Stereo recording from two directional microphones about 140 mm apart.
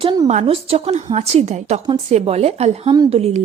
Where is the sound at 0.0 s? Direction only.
30° right (ahead or behind).